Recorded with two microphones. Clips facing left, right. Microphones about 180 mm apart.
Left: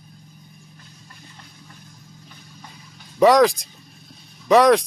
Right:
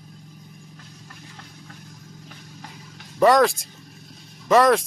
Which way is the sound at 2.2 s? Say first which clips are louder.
Right 2 dB; 85° right.